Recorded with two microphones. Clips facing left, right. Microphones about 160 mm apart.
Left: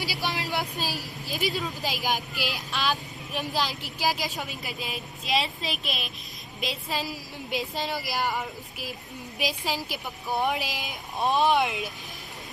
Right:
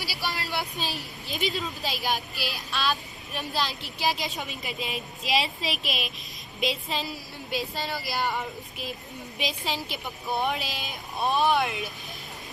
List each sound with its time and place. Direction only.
0.0 s vehicle: 15° left (ahead or behind)
0.8 s a woman's voice: 5° left (ahead or behind)
7.5 s speech: 15° left (ahead or behind)